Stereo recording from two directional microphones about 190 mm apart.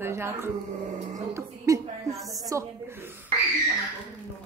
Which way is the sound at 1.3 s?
15° right (ahead or behind).